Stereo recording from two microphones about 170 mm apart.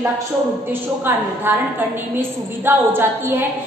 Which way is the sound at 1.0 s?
10° right (ahead or behind).